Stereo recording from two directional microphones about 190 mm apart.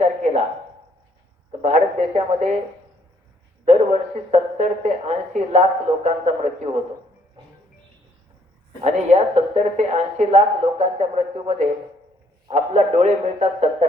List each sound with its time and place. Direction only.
0.0 s a sound: 35° right (ahead or behind)
1.6 s a woman's voice: 40° right (ahead or behind)
3.7 s a woman's voice: 35° right (ahead or behind)
8.8 s a woman's voice: 35° right (ahead or behind)